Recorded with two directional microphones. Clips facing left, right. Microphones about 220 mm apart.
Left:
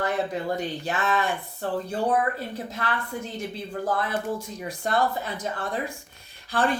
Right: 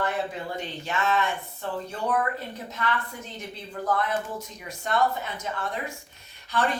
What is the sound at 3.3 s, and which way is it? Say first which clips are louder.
Speech: left 5 dB; 30° left (ahead or behind).